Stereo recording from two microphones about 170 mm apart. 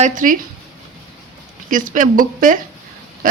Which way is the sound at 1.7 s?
50° right (ahead or behind).